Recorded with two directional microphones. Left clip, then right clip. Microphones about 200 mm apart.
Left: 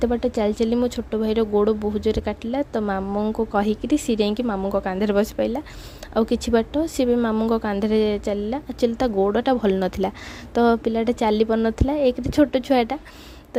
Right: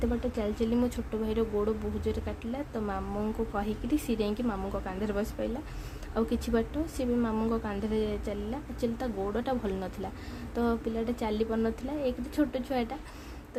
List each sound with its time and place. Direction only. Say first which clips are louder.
0.0 s speech: left 11 dB; 35° left (ahead or behind)